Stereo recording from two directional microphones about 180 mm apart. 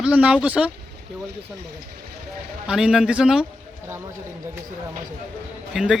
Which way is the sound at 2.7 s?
5° right (ahead or behind).